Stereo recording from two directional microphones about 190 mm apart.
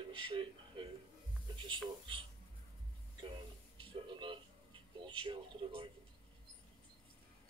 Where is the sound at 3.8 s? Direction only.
25° right (ahead or behind).